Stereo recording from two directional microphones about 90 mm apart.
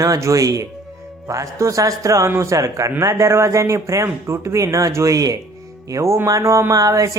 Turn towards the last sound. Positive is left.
turn(degrees=-40)  # may be behind; listen again after turning